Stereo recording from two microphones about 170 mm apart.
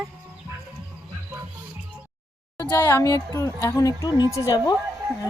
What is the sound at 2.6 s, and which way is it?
Speech, 15° left (ahead or behind).